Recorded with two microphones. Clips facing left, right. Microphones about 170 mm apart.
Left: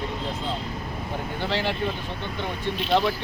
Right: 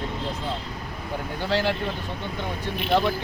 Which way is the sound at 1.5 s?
10° right (ahead or behind).